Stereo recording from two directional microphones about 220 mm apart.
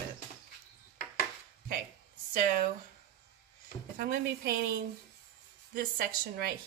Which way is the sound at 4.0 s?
45° right (ahead or behind).